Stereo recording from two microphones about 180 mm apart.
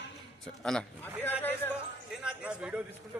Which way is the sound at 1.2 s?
10° left (ahead or behind).